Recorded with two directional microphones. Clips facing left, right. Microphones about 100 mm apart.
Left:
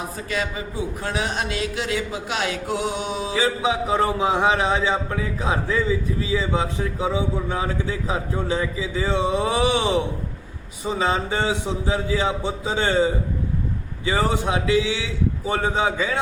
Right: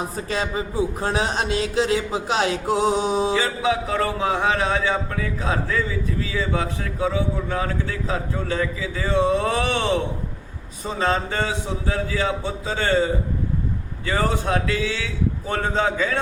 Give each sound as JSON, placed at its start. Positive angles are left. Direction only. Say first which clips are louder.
{"t": 0.3, "sound": "speech", "louder": "right 1 dB", "side_deg": -30}
{"t": 3.6, "sound": "a man's voice", "louder": "left 1 dB", "side_deg": 20}